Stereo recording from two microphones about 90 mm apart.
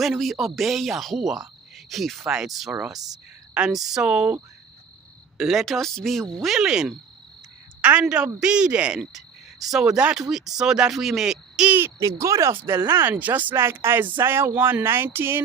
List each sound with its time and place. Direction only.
0.0 s cricket: centre (ahead or behind)
2.7 s speech: 10° right (ahead or behind)
5.4 s cricket: centre (ahead or behind)
7.8 s a woman's voice: 15° right (ahead or behind)
8.0 s cricket: 10° right (ahead or behind)
11.7 s speech: 25° right (ahead or behind)